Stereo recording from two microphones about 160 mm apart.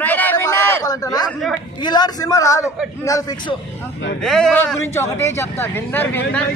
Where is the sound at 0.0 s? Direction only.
10° left (ahead or behind).